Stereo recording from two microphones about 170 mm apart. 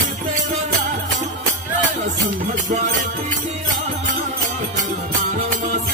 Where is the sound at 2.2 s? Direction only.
45° right (ahead or behind).